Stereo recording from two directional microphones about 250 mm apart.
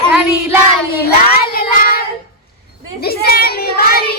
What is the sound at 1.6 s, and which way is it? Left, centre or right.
Child singing, left.